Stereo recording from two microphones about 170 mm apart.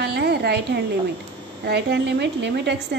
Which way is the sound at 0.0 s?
70° right (ahead or behind).